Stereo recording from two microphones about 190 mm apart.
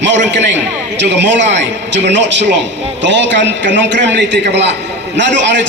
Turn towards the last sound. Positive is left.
turn(degrees=-70)  # may be behind; listen again after turning